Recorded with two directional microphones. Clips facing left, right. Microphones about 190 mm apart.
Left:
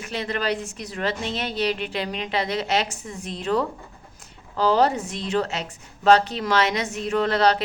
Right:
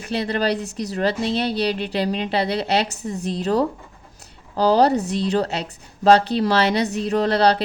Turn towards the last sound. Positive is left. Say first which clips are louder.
# right 2 dB
turn(degrees=-35)  # may be behind; listen again after turning